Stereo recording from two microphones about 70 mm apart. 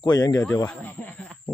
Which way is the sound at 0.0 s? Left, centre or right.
Left.